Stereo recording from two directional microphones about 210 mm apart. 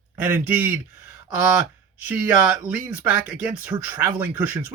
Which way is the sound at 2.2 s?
5° right (ahead or behind).